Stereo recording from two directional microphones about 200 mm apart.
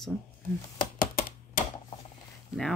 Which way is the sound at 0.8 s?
45° left (ahead or behind).